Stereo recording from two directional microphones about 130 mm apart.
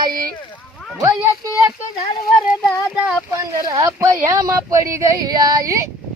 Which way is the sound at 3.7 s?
25° right (ahead or behind).